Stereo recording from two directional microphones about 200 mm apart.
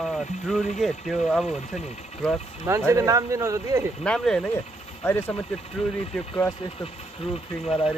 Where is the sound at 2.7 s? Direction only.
15° right (ahead or behind).